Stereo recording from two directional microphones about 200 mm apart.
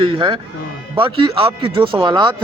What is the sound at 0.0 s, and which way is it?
A man's voice, 25° right (ahead or behind).